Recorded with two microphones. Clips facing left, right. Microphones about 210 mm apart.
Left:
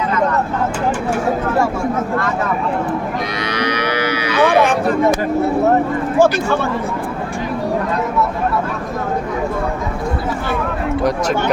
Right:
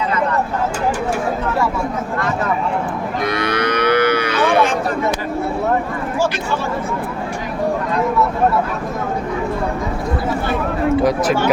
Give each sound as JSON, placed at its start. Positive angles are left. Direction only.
{"t": 3.3, "sound": "livestock", "side_deg": -55}
{"t": 4.4, "sound": "a sound", "side_deg": 55}
{"t": 6.1, "sound": "speech", "side_deg": 55}
{"t": 11.0, "sound": "speech", "side_deg": -5}